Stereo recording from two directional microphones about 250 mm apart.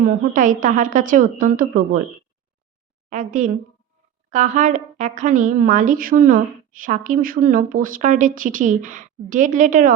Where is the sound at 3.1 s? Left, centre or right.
Right.